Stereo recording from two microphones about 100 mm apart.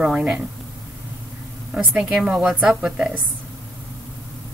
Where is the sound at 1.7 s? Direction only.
15° right (ahead or behind).